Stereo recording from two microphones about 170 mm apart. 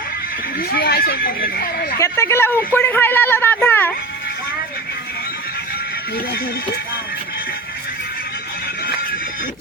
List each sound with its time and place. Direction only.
0.7 s speech: 70° left (ahead or behind)
2.0 s speech: 15° left (ahead or behind)